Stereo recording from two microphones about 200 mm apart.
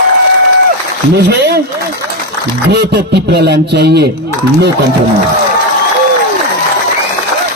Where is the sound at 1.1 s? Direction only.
55° right (ahead or behind).